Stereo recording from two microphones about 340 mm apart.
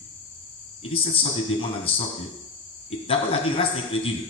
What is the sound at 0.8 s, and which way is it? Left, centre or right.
Speech, centre.